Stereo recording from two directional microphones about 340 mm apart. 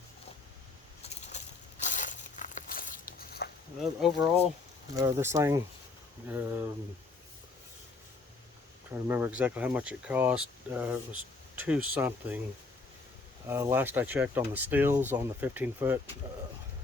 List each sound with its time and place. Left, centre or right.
1.8 s a sound: left
4.0 s speech: centre
9.0 s speech: centre
13.5 s speech: centre